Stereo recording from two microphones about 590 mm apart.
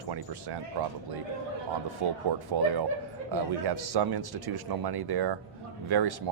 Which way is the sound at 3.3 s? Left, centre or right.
Right.